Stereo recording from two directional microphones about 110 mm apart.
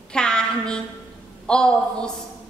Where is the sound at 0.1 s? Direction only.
5° left (ahead or behind).